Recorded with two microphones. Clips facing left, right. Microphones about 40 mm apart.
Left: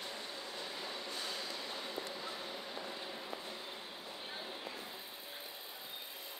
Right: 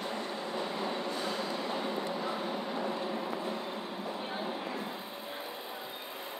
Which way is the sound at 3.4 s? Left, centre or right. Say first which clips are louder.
Right 10 dB; right.